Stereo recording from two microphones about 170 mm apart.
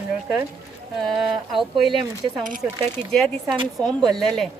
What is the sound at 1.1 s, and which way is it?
Speech, centre (ahead or behind).